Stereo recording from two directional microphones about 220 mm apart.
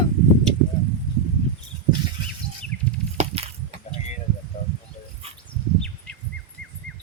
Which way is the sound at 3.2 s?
30° right (ahead or behind).